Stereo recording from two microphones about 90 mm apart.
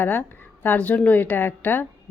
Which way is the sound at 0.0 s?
25° left (ahead or behind).